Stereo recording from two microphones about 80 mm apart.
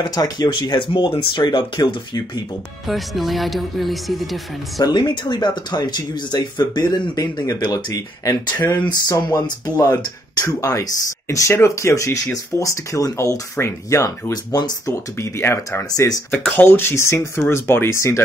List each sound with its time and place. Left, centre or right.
0.0 s speech: left
0.5 s speech: left
2.9 s speech: centre
4.7 s speech: left
14.3 s speech: left
14.9 s speech: left